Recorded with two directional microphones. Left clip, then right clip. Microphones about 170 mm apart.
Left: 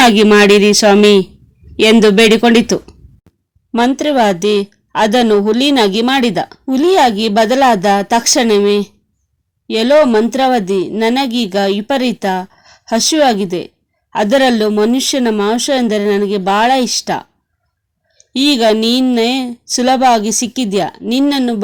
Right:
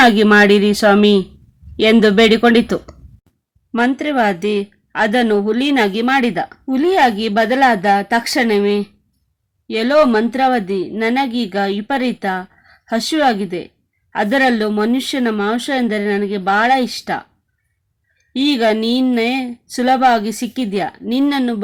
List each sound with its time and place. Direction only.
0.0 s speech: 20° left (ahead or behind)
3.7 s speech: 35° left (ahead or behind)
18.3 s speech: 35° left (ahead or behind)